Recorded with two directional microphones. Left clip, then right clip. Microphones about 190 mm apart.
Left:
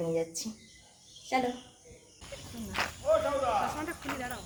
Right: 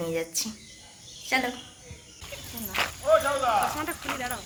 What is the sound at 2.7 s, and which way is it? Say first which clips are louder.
Speech: right 5 dB; 25° right (ahead or behind).